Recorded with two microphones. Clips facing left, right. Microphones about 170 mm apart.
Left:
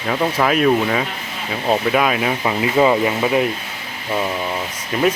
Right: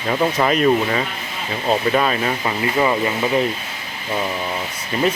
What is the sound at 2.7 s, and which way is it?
Speech, 20° left (ahead or behind).